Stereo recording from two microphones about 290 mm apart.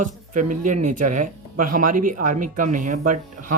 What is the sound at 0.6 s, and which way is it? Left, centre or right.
Speech, right.